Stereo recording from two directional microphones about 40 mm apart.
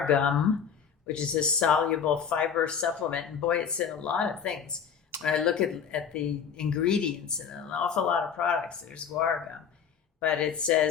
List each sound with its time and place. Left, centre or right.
0.0 s speech: left
5.2 s speech: centre
10.2 s speech: left